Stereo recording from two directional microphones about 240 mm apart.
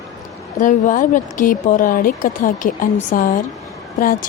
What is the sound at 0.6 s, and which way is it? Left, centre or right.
Mantra, left.